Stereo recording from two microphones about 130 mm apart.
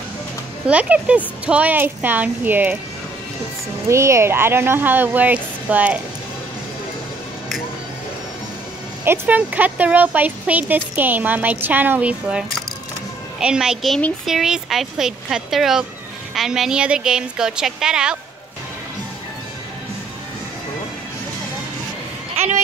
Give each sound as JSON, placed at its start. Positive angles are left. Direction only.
{"t": 0.7, "sound": "speech", "side_deg": -10}
{"t": 3.9, "sound": "speech", "side_deg": -20}
{"t": 9.0, "sound": "speech", "side_deg": -15}